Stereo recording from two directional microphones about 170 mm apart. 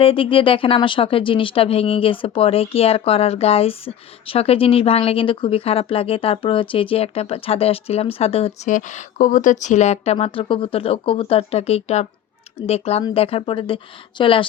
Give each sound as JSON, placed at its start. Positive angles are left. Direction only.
{"t": 0.0, "sound": "speech", "side_deg": 30}
{"t": 8.7, "sound": "speech", "side_deg": 45}